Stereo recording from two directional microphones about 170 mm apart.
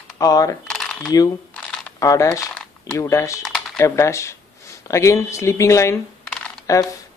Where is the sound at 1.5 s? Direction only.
5° left (ahead or behind).